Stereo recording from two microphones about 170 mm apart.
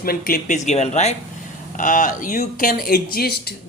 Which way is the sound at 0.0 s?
60° left (ahead or behind).